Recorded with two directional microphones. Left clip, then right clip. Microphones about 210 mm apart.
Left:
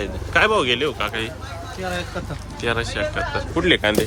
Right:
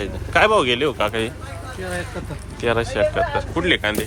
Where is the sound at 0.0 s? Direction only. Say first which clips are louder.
Right 1 dB; 10° left (ahead or behind).